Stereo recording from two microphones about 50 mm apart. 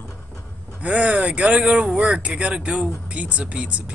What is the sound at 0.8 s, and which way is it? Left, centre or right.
Speech, right.